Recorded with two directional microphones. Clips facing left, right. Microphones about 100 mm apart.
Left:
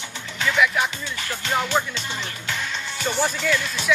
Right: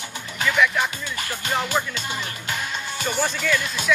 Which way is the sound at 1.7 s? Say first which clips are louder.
Left 2 dB; 15° left (ahead or behind).